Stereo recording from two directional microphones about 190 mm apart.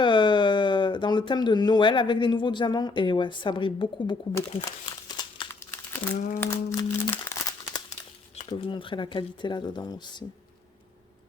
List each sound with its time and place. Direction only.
0.0 s speech: 25° left (ahead or behind)
5.0 s crumpling: 20° left (ahead or behind)
6.1 s speech: 45° left (ahead or behind)
6.4 s crumpling: 15° left (ahead or behind)
8.4 s speech: 30° left (ahead or behind)